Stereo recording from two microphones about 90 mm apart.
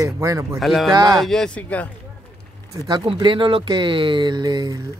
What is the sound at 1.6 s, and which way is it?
Speech, 15° left (ahead or behind).